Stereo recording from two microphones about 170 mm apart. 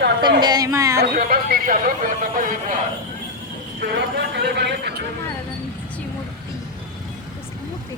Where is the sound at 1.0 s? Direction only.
65° right (ahead or behind).